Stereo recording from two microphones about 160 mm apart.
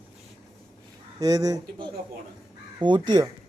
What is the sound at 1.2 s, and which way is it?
Speech, 20° right (ahead or behind).